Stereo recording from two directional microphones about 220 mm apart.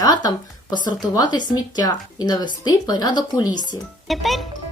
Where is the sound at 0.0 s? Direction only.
15° left (ahead or behind).